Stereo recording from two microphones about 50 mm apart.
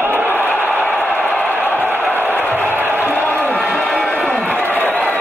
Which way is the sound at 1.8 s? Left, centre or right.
Right.